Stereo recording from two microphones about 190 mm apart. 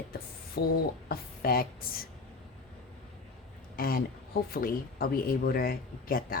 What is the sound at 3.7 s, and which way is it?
Speech, 50° left (ahead or behind).